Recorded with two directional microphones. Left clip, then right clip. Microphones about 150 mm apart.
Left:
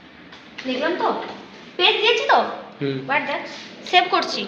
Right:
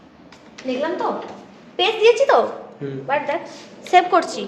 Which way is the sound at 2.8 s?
45° left (ahead or behind).